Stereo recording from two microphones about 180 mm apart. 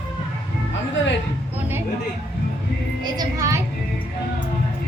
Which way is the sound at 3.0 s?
20° right (ahead or behind).